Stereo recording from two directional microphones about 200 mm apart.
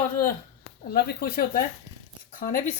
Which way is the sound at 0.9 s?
50° left (ahead or behind).